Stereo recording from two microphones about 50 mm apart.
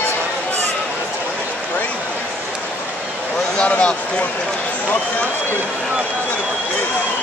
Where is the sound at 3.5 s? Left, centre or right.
Left.